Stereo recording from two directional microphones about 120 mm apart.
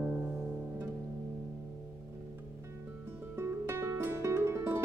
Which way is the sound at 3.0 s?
20° right (ahead or behind).